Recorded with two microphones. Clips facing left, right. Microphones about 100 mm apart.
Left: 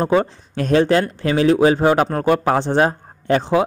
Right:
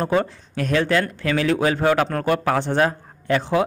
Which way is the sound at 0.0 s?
25° left (ahead or behind).